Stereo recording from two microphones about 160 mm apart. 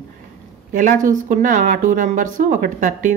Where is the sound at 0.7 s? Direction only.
55° right (ahead or behind).